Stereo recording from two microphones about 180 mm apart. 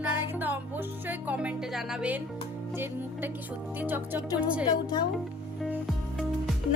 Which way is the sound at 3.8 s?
10° right (ahead or behind).